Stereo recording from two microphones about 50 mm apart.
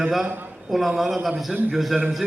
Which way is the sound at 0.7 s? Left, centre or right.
Centre.